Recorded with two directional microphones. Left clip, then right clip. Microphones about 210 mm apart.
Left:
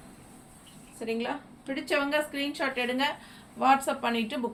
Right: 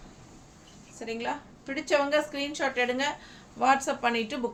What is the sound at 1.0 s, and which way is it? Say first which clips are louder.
A woman's voice: left 1 dB; 15° right (ahead or behind).